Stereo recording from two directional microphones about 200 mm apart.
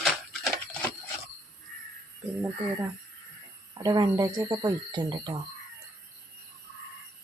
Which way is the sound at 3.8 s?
20° right (ahead or behind).